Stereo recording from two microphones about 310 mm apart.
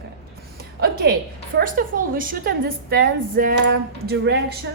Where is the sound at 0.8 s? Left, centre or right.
Right.